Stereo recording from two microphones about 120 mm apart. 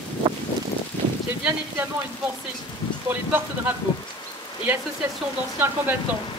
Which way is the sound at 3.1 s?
15° right (ahead or behind).